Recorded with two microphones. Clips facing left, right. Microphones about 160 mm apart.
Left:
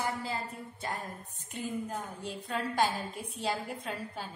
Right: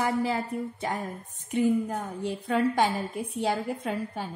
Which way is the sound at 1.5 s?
70° right (ahead or behind).